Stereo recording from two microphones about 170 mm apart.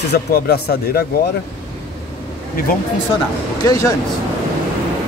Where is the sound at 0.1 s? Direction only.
70° left (ahead or behind).